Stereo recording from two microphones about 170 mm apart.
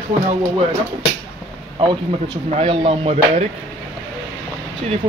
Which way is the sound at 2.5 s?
35° right (ahead or behind).